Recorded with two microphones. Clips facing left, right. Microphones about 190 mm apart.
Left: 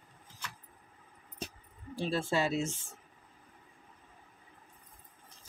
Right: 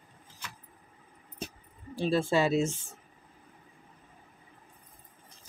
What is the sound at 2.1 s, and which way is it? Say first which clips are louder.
Speech: right 6 dB; 90° right.